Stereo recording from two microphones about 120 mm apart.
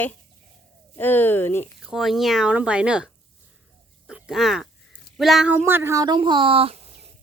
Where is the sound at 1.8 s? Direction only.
Centre (ahead or behind).